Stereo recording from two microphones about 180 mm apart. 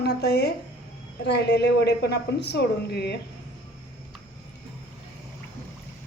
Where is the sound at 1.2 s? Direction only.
70° left (ahead or behind).